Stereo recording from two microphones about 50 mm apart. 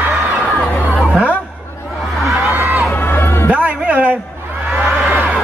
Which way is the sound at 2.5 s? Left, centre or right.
Right.